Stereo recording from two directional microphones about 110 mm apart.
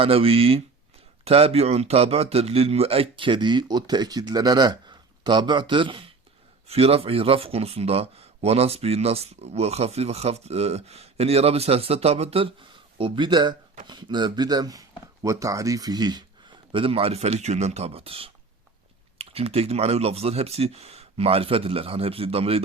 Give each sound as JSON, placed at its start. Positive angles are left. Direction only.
{"t": 0.0, "sound": "a man's voice", "side_deg": -60}
{"t": 6.7, "sound": "speech", "side_deg": -65}
{"t": 13.0, "sound": "a man's voice", "side_deg": -50}